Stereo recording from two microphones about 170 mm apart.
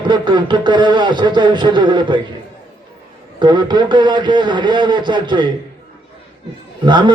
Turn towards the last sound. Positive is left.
turn(degrees=-25)  # may be behind; listen again after turning